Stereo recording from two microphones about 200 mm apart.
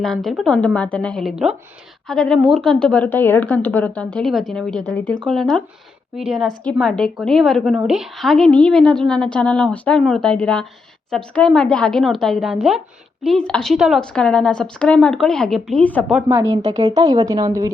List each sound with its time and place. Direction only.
0.0 s a woman's voice: centre (ahead or behind)
16.3 s speech: 15° right (ahead or behind)
16.6 s speech: 30° right (ahead or behind)
17.0 s speech: 20° right (ahead or behind)